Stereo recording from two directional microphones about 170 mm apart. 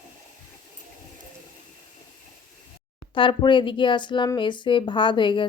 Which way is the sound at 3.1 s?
30° left (ahead or behind).